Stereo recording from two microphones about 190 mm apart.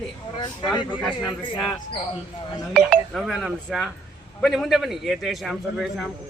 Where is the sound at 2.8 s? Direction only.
5° right (ahead or behind).